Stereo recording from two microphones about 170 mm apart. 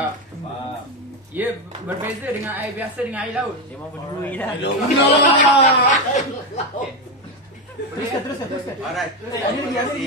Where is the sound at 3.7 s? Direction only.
10° left (ahead or behind).